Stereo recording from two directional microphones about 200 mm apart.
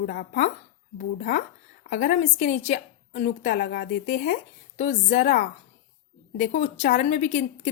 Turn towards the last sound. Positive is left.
turn(degrees=35)  # may be behind; listen again after turning